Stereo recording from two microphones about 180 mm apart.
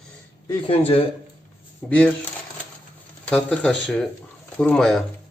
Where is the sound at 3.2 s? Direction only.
5° left (ahead or behind).